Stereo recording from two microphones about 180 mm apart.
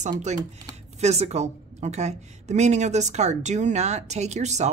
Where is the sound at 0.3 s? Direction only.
40° right (ahead or behind).